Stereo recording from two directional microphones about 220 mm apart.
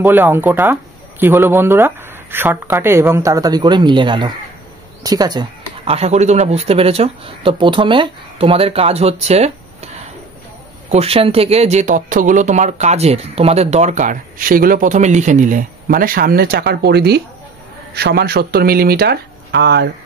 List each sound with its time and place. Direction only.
0.0 s speech: 10° right (ahead or behind); by 9.8 s 30° right (ahead or behind)
10.9 s speech: 25° right (ahead or behind); by 19.9 s 50° right (ahead or behind)